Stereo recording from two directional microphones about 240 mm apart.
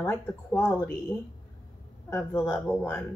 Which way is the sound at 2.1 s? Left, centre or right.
Centre.